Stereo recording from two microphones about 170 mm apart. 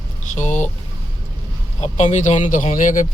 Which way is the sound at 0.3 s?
45° left (ahead or behind).